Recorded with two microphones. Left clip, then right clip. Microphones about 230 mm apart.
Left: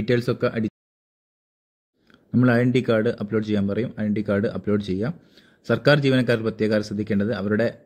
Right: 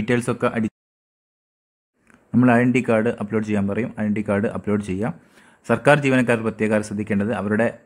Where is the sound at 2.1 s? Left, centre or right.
Centre.